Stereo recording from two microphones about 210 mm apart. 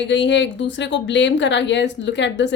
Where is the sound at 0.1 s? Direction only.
60° left (ahead or behind).